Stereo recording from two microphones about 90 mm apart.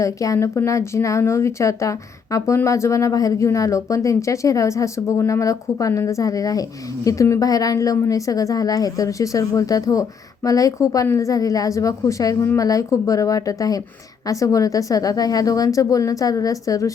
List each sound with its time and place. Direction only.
0.0 s speech: 35° left (ahead or behind)